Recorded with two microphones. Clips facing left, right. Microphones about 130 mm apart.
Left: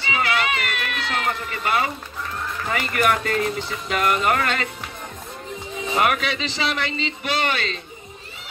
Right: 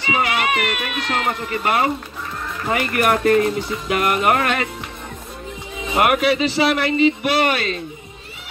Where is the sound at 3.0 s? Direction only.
40° right (ahead or behind).